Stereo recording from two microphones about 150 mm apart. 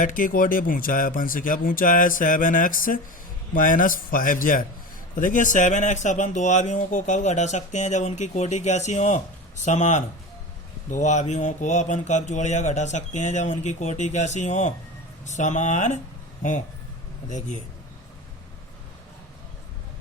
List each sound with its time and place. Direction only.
0.0 s a man's voice: 65° left (ahead or behind)
17.2 s speech: 55° left (ahead or behind)